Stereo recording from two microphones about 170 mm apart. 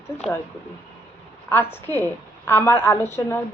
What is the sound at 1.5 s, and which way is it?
Speech, 15° left (ahead or behind).